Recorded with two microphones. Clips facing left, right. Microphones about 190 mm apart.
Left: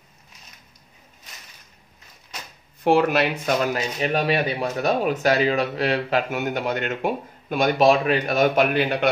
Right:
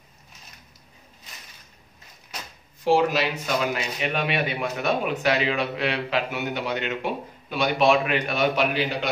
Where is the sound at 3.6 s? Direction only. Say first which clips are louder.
Left 3 dB; 40° left (ahead or behind).